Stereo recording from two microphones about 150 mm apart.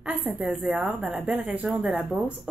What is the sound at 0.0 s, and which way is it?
A woman's voice, 10° right (ahead or behind).